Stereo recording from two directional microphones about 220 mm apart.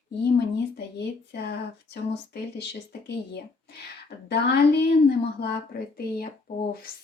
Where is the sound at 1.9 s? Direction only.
50° left (ahead or behind).